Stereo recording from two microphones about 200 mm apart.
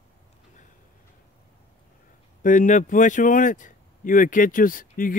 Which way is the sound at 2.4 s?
40° left (ahead or behind).